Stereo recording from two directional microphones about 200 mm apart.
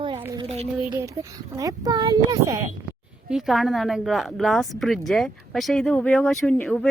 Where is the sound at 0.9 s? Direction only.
15° right (ahead or behind).